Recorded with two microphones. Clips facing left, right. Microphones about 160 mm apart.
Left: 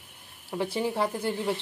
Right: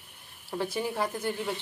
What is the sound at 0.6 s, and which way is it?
Speech, 25° left (ahead or behind).